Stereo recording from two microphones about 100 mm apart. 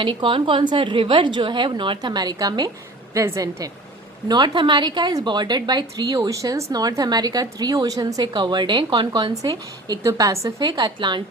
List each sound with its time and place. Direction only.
0.0 s a woman's voice: 55° right (ahead or behind)
3.2 s a woman's voice: 30° right (ahead or behind)
4.3 s a woman's voice: 45° right (ahead or behind)
9.3 s a woman's voice: 35° right (ahead or behind)
10.6 s a woman's voice: 45° right (ahead or behind)